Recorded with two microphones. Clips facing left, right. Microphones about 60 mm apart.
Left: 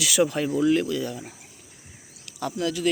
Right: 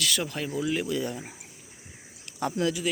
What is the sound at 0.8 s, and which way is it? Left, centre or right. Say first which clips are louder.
Speech: left 2 dB; right.